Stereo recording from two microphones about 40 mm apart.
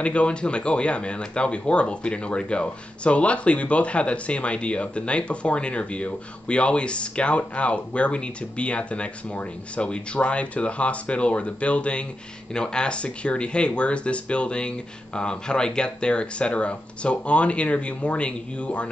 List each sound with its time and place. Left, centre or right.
0.0 s speech: left